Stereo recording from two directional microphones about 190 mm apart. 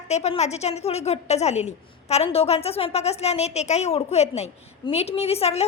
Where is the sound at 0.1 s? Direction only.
35° left (ahead or behind).